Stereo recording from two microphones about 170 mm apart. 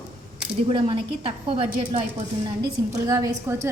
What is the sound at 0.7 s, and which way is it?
A woman's voice, 30° right (ahead or behind).